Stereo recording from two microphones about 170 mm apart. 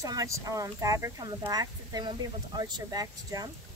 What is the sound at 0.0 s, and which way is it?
Speech, 20° right (ahead or behind).